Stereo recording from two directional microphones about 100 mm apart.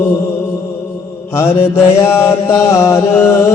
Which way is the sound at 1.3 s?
25° left (ahead or behind).